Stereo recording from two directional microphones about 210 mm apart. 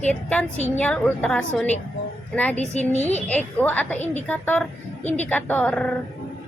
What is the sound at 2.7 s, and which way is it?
Speech, 30° left (ahead or behind).